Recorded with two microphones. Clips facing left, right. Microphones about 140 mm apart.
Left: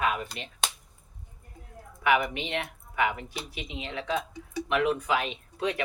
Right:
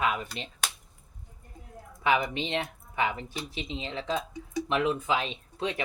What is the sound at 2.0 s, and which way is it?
Speech, 30° right (ahead or behind).